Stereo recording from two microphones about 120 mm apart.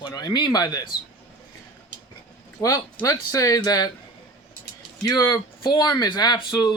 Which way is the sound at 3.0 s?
30° left (ahead or behind).